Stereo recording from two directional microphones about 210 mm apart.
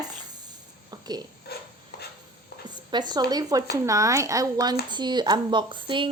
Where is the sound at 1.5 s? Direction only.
50° left (ahead or behind).